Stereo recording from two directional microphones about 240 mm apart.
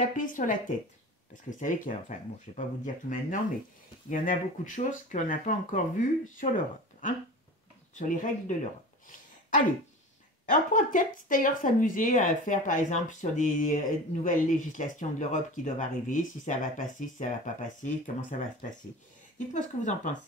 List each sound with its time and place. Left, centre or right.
0.0 s speech: left
7.9 s speech: left
10.5 s speech: left